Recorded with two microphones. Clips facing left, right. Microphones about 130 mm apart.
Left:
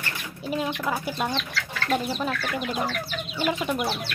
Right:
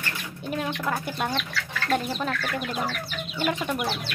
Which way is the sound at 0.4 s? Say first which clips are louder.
Left 2 dB; 5° left (ahead or behind).